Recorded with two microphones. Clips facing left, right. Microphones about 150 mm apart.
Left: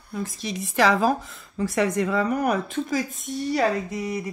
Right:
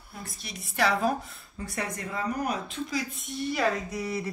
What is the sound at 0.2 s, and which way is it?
Speech, 90° left.